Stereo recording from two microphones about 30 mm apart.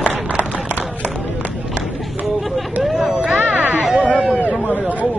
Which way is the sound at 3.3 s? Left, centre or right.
Right.